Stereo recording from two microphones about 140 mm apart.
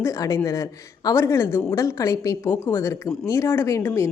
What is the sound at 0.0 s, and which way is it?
Speech, 20° left (ahead or behind).